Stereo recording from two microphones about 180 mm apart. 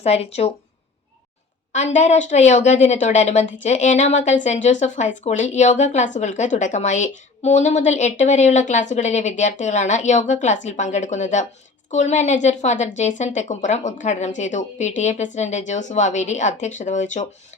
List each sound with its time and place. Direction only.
0.0 s a woman's voice: 35° left (ahead or behind)
1.7 s a woman's voice: 40° left (ahead or behind)